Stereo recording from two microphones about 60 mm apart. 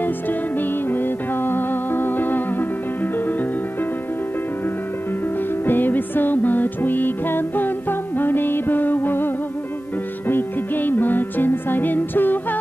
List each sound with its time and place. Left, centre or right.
0.6 s music: left
5.7 s music: left